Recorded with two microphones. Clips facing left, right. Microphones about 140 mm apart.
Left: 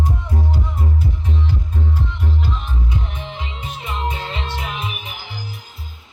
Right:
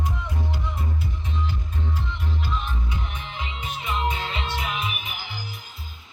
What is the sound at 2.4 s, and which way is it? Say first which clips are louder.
Music: left 3 dB; 35° left (ahead or behind).